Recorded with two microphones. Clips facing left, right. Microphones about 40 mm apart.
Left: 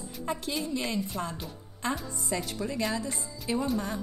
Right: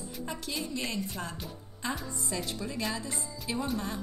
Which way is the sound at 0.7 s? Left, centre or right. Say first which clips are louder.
Left 3 dB; centre.